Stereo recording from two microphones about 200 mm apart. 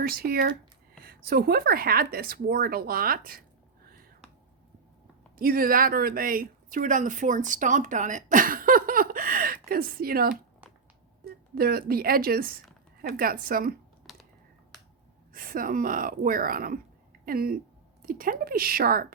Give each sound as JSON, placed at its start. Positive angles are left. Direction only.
{"t": 0.0, "sound": "speech", "side_deg": -50}
{"t": 5.4, "sound": "speech", "side_deg": -45}
{"t": 11.5, "sound": "speech", "side_deg": -50}
{"t": 15.3, "sound": "speech", "side_deg": -45}